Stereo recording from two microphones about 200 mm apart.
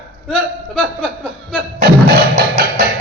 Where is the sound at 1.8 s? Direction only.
50° right (ahead or behind).